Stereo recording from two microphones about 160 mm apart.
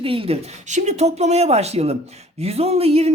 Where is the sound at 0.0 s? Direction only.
35° right (ahead or behind).